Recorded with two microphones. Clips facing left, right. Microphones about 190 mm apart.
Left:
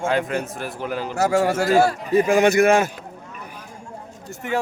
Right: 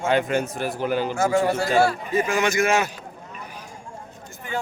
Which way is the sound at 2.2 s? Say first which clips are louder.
Left 7 dB; 55° left (ahead or behind).